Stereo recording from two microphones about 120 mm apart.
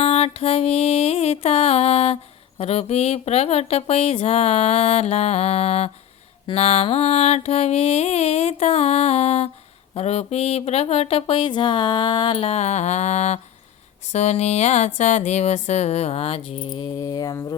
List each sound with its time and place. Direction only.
0.0 s mantra: 55° left (ahead or behind)
2.6 s speech: 60° left (ahead or behind); by 12.4 s 40° left (ahead or behind)
12.4 s a sound: 65° left (ahead or behind); by 16.9 s 40° left (ahead or behind)
17.0 s mantra: 30° left (ahead or behind)